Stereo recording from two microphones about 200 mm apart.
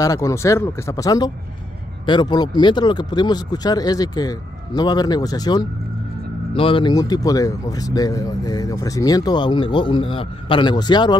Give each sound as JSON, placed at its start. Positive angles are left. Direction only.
{"t": 0.0, "sound": "speech", "side_deg": 15}